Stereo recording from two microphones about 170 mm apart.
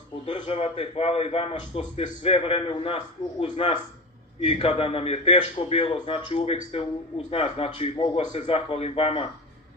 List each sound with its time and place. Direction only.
0.2 s a man's voice: 35° left (ahead or behind)